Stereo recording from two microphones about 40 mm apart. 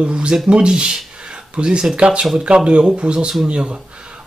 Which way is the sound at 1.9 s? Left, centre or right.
Right.